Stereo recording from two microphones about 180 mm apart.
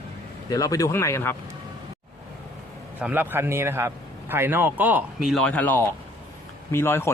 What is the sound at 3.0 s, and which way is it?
A man's voice, 10° right (ahead or behind).